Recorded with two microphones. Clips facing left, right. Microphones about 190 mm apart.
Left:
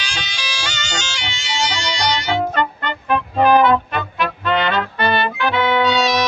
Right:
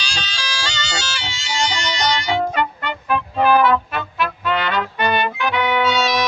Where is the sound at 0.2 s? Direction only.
10° left (ahead or behind).